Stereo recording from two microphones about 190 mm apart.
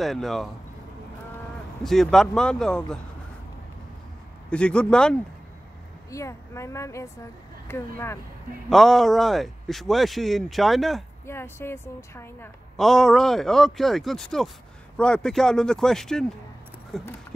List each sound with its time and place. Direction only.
0.0 s speech: centre (ahead or behind)
1.8 s speech: centre (ahead or behind)
4.5 s speech: 5° left (ahead or behind)
6.0 s a woman's voice: 15° left (ahead or behind)
8.6 s speech: centre (ahead or behind)
11.2 s a woman's voice: 10° left (ahead or behind)
12.7 s speech: centre (ahead or behind)